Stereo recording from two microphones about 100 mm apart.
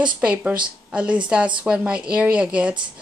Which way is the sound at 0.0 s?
10° right (ahead or behind).